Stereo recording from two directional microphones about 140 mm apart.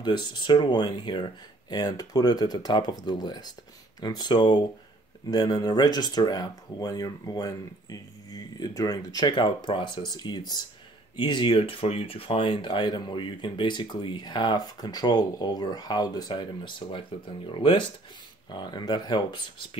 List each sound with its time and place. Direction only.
0.0 s speech: 35° left (ahead or behind)